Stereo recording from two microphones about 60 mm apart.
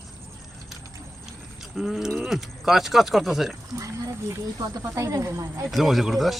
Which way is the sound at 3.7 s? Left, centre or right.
Right.